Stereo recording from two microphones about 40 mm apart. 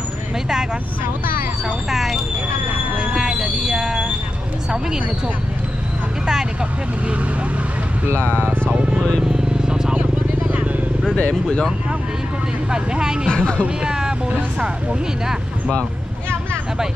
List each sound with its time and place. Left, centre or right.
1.9 s speech: centre
3.2 s train: centre
8.5 s speech: right
9.2 s vehicle: centre
12.7 s speech: right
13.3 s speech: left
13.8 s speech: centre